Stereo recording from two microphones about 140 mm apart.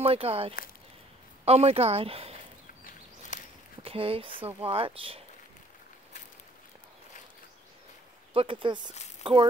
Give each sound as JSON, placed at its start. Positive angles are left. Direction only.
{"t": 0.0, "sound": "speech", "side_deg": -45}
{"t": 2.8, "sound": "a sound", "side_deg": 85}
{"t": 3.8, "sound": "speech", "side_deg": -40}
{"t": 8.3, "sound": "speech", "side_deg": -40}